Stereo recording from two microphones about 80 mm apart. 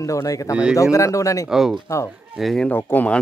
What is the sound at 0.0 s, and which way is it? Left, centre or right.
Speech, left.